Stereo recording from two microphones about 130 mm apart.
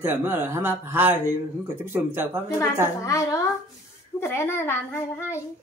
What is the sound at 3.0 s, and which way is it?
A child's voice, 25° left (ahead or behind).